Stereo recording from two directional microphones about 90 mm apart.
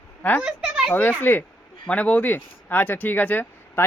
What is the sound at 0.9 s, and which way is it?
Speech, 20° left (ahead or behind).